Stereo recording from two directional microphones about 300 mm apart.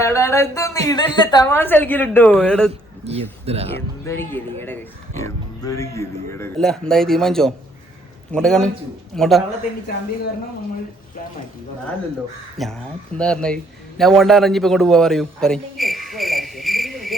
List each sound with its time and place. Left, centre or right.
0.0 s a woman's voice: centre
3.0 s speech: centre
4.0 s a woman's voice: centre
12.6 s a man's voice: centre